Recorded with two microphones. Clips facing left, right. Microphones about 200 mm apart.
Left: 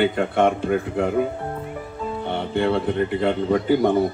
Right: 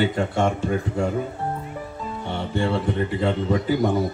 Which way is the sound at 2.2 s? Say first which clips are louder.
Left 3 dB; 55° left (ahead or behind).